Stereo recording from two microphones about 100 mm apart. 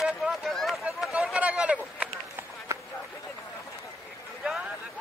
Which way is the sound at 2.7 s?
30° right (ahead or behind).